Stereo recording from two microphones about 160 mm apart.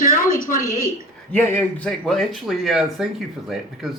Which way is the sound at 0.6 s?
20° right (ahead or behind).